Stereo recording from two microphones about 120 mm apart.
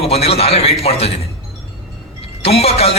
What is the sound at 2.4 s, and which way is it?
Speech, 55° left (ahead or behind).